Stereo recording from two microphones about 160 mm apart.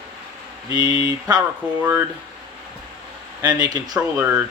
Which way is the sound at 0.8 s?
25° right (ahead or behind).